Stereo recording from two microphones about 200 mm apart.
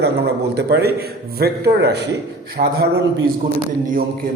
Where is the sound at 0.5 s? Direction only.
55° right (ahead or behind).